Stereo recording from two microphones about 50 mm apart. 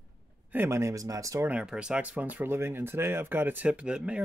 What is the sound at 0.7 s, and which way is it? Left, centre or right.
Speech, right.